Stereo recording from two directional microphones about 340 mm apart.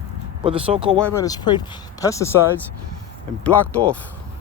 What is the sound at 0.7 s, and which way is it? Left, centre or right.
Speech, centre.